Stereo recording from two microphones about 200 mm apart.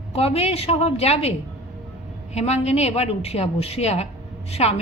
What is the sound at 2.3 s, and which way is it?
A woman's voice, 35° left (ahead or behind).